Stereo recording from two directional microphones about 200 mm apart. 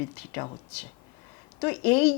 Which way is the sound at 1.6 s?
10° left (ahead or behind).